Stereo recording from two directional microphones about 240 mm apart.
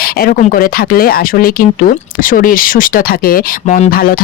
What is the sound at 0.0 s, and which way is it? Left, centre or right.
Speech, left.